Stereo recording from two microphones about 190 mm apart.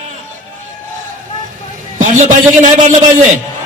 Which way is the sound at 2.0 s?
40° right (ahead or behind).